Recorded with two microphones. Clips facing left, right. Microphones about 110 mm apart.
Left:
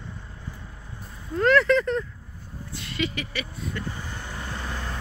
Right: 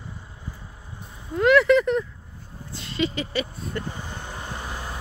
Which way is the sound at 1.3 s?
15° right (ahead or behind).